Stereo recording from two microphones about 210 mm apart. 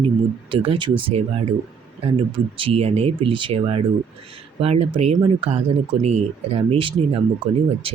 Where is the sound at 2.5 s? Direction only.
25° right (ahead or behind).